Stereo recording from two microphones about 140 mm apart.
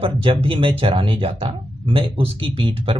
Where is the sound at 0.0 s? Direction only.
40° right (ahead or behind).